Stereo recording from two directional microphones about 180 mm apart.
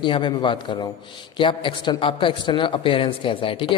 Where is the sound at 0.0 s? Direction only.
25° left (ahead or behind).